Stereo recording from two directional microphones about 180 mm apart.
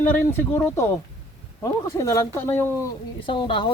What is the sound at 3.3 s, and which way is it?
Speech, 25° left (ahead or behind).